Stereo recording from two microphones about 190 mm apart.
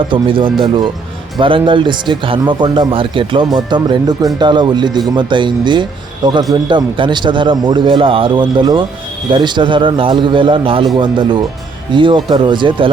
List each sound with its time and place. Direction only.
0.1 s a man's voice: 25° right (ahead or behind)